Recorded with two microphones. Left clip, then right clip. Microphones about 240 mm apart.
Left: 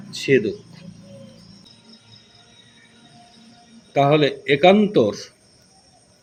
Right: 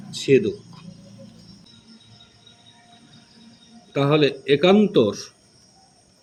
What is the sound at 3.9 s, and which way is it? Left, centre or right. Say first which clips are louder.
A man's voice: left 3 dB; centre.